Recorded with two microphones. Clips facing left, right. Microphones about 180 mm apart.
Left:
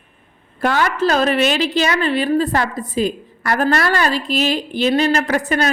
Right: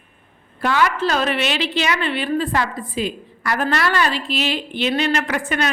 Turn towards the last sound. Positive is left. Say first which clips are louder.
# left 4 dB
turn(degrees=40)  # may be behind; listen again after turning